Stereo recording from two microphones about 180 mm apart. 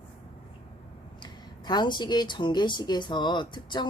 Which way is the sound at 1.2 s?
25° left (ahead or behind).